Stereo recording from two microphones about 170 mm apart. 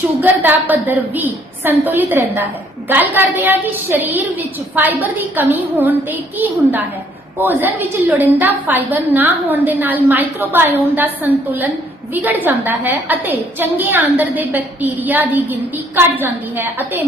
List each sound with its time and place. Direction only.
0.2 s a woman's voice: 10° right (ahead or behind)